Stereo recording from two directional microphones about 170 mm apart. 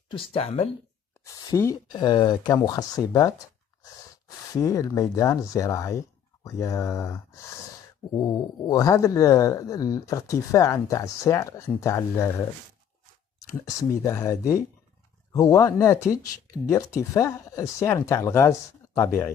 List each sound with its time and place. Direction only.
0.1 s speech: 30° left (ahead or behind)
1.2 s speech: 20° left (ahead or behind)
4.5 s speech: 20° left (ahead or behind)
8.6 s speech: 20° left (ahead or behind)
13.7 s speech: 20° left (ahead or behind)